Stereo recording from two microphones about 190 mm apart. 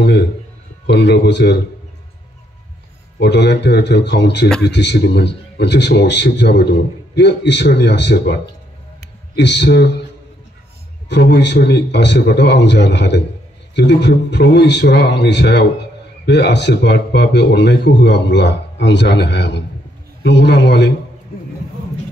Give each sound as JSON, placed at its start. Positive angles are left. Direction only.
{"t": 0.8, "sound": "speech", "side_deg": 65}
{"t": 3.2, "sound": "speech", "side_deg": 65}
{"t": 11.1, "sound": "a man's voice", "side_deg": 65}